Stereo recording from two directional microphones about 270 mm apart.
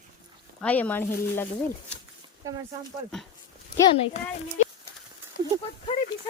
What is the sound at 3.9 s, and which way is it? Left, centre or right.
Speech, left.